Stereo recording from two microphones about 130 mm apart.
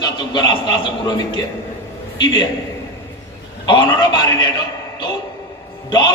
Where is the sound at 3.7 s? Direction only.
35° left (ahead or behind).